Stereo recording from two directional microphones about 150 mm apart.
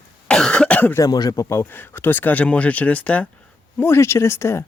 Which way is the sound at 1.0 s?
25° left (ahead or behind).